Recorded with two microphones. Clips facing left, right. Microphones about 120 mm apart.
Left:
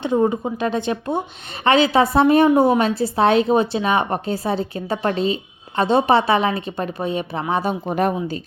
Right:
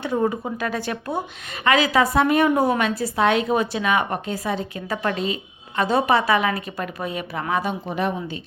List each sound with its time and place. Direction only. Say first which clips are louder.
0.0 s a woman's voice: left 4 dB; 20° left (ahead or behind); by 8.4 s 45° left (ahead or behind)